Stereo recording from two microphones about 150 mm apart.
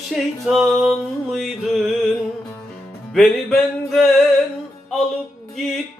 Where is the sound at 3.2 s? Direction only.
Centre (ahead or behind).